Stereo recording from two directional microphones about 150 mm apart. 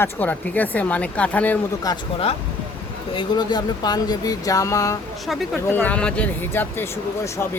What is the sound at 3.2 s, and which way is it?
Speech, 30° left (ahead or behind).